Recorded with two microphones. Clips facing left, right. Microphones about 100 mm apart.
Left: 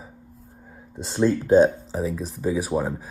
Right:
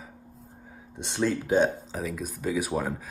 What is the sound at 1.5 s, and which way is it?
Speech, 35° left (ahead or behind).